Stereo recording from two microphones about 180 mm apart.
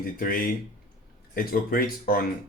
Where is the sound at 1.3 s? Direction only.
55° left (ahead or behind).